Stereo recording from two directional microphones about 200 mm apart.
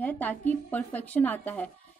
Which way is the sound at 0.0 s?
10° left (ahead or behind).